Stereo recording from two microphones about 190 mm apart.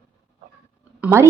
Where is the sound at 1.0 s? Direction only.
15° right (ahead or behind).